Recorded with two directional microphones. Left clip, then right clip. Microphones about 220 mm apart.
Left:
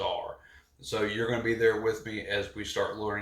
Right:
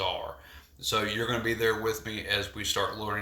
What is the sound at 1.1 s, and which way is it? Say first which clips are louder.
Speech: even; 10° right (ahead or behind).